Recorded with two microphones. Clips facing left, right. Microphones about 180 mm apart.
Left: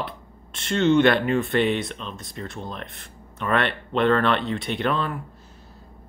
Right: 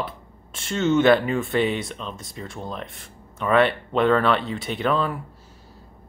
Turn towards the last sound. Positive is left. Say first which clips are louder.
# right 2 dB
turn(degrees=-5)  # may be behind; listen again after turning